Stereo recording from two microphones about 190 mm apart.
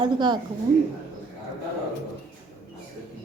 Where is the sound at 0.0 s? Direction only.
25° right (ahead or behind).